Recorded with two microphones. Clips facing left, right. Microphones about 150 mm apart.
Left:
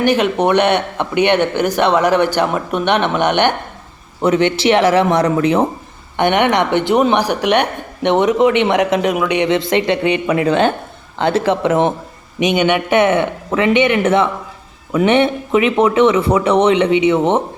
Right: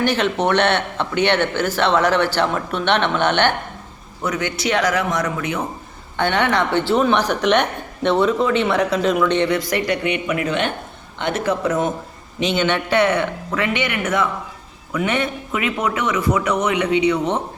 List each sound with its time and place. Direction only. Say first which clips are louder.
0.0 s speech: left 5 dB; 15° left (ahead or behind)
4.2 s speech: left 9 dB; 25° left (ahead or behind)
6.1 s speech: left 5 dB; 20° left (ahead or behind)
12.4 s speech: left 5 dB; 15° left (ahead or behind)